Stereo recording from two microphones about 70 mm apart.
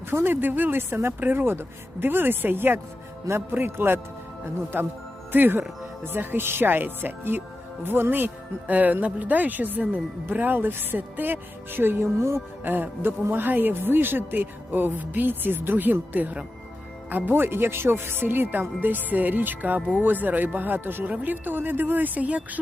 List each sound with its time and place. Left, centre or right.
0.1 s speech: right